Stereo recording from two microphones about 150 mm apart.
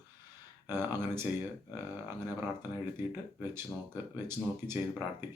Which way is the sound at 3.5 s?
15° right (ahead or behind).